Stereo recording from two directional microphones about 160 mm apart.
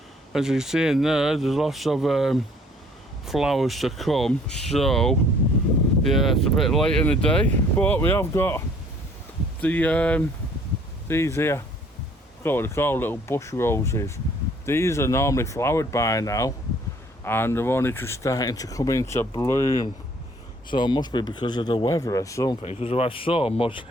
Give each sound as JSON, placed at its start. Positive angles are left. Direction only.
{"t": 0.3, "sound": "speech", "side_deg": -5}
{"t": 22.6, "sound": "speech", "side_deg": 40}